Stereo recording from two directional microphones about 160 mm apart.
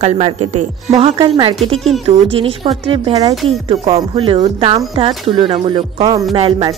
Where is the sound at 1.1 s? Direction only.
25° right (ahead or behind).